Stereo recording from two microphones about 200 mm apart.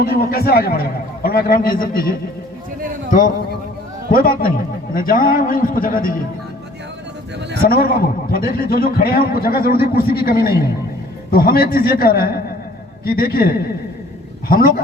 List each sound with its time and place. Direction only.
0.0 s a man's voice: 50° left (ahead or behind)
7.6 s a man's voice: 45° left (ahead or behind)